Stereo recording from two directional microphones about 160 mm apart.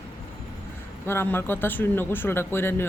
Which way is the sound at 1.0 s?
15° left (ahead or behind).